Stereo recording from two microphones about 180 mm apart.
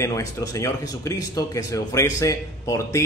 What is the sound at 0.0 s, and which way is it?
A man's voice, 20° left (ahead or behind).